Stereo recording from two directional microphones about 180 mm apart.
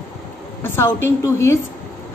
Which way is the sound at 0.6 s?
15° left (ahead or behind).